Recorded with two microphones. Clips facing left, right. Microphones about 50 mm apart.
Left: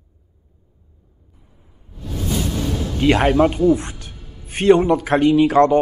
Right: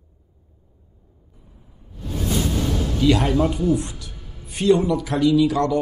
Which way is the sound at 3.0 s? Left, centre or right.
Left.